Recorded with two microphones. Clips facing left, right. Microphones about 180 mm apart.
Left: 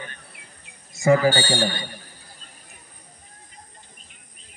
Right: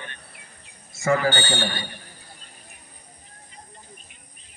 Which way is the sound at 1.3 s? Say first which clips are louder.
Left 3 dB; 35° left (ahead or behind).